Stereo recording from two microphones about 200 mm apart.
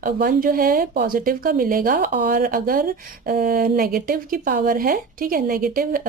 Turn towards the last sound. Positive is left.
turn(degrees=-45)  # may be behind; listen again after turning